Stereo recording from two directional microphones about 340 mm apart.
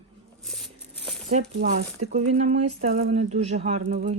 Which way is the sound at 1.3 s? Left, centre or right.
Right.